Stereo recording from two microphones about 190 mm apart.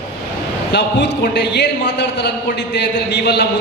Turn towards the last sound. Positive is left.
turn(degrees=60)  # may be behind; listen again after turning